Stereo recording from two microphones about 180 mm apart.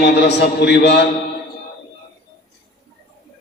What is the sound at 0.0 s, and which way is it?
Mantra, 70° left (ahead or behind).